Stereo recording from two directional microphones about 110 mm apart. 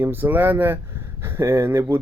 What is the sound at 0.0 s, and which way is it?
Speech, 20° right (ahead or behind).